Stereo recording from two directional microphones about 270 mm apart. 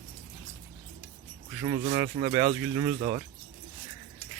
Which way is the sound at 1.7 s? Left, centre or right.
Right.